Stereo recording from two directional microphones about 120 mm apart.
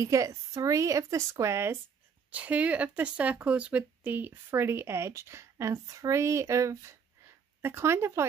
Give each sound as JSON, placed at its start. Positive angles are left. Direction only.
{"t": 0.0, "sound": "speech", "side_deg": -25}
{"t": 2.3, "sound": "speech", "side_deg": -10}